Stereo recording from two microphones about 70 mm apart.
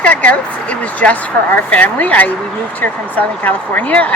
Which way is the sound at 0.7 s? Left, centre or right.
Centre.